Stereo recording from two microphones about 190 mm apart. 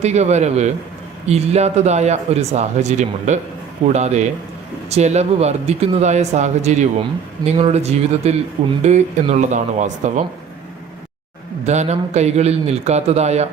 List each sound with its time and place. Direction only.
0.0 s speech: 35° right (ahead or behind)
11.6 s speech: 35° right (ahead or behind)